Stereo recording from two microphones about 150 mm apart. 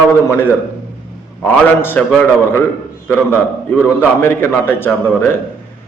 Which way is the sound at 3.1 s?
15° left (ahead or behind).